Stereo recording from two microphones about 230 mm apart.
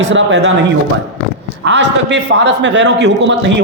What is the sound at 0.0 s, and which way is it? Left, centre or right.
Speech, right.